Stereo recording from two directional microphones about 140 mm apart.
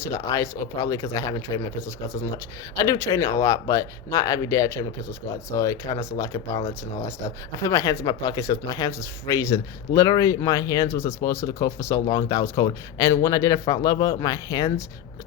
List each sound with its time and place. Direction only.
0.1 s speech: 20° left (ahead or behind)
2.7 s speech: 25° left (ahead or behind)